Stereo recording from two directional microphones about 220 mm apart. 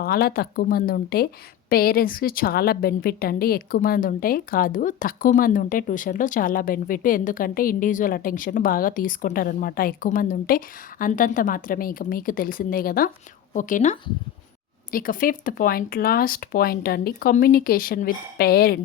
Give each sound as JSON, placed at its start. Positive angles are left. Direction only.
{"t": 0.0, "sound": "a woman's voice", "side_deg": 45}
{"t": 14.9, "sound": "a woman's voice", "side_deg": 40}